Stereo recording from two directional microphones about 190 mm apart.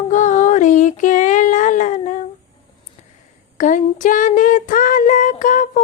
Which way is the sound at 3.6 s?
45° left (ahead or behind).